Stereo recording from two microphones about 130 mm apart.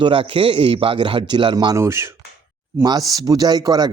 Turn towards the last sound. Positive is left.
turn(degrees=-30)  # may be behind; listen again after turning